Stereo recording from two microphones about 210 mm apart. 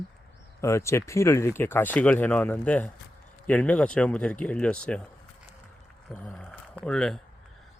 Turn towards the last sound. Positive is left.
turn(degrees=5)  # may be behind; listen again after turning